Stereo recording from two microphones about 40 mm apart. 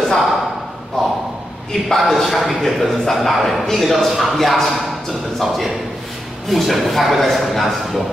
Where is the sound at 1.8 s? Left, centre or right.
Centre.